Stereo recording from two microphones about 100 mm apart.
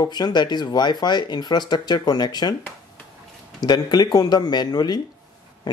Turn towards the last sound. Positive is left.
turn(degrees=45)  # may be behind; listen again after turning